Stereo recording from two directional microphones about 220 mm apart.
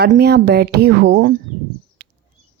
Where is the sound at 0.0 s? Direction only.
45° right (ahead or behind).